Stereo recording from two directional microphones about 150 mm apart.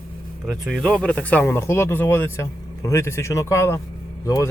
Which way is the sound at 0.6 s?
Centre (ahead or behind).